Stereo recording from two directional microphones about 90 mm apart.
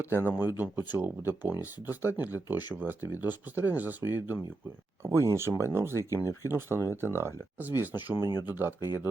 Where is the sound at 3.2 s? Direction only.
20° right (ahead or behind).